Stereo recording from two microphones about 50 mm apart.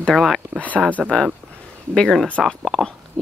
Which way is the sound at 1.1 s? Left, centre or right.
Centre.